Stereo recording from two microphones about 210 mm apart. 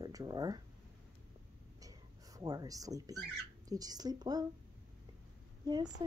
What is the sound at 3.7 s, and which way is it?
Speech, 20° right (ahead or behind).